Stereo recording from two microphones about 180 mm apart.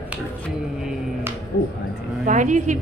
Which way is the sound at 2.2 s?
45° right (ahead or behind).